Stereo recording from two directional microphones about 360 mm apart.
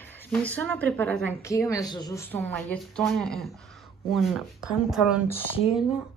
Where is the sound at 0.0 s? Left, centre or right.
Centre.